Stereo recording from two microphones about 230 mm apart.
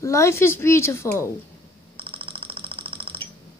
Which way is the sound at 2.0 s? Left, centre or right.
Right.